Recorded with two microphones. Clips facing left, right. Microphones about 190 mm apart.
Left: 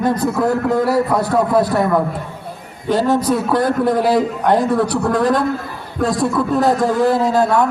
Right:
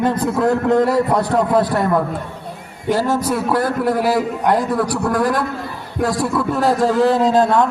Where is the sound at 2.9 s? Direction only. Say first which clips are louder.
Left 3 dB; 20° left (ahead or behind).